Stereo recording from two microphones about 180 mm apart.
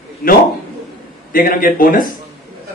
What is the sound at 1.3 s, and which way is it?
Speech, 50° left (ahead or behind).